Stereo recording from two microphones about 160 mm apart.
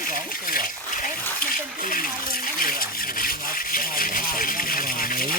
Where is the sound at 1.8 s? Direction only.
60° left (ahead or behind).